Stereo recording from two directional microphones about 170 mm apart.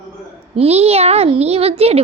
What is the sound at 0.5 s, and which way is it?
A child's voice, 35° right (ahead or behind).